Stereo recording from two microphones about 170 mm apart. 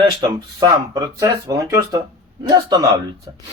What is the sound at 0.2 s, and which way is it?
Speech, 25° right (ahead or behind).